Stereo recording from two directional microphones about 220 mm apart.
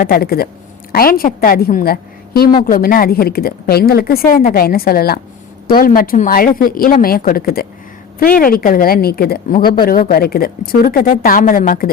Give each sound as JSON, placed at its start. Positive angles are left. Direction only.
{"t": 0.0, "sound": "a woman's voice", "side_deg": 45}